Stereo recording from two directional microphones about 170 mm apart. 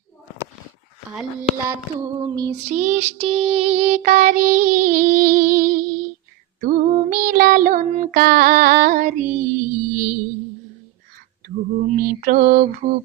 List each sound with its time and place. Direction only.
2.1 s music: 25° right (ahead or behind)
2.6 s music: 45° right (ahead or behind)
3.2 s music: 30° right (ahead or behind); by 10.2 s 45° right (ahead or behind)
11.4 s mantra: 60° right (ahead or behind)